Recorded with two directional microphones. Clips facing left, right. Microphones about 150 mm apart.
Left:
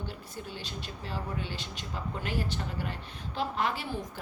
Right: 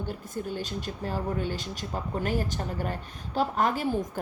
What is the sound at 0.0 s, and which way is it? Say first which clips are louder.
Speech: right 7 dB; 50° right (ahead or behind).